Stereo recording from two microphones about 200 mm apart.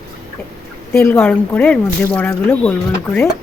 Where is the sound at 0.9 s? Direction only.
10° left (ahead or behind).